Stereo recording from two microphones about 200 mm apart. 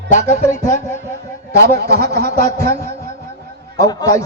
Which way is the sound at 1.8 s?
55° right (ahead or behind).